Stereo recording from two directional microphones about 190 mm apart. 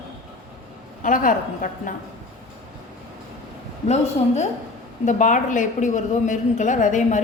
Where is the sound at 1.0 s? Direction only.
45° left (ahead or behind).